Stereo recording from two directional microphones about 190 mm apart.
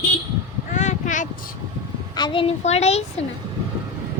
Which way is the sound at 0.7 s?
40° left (ahead or behind).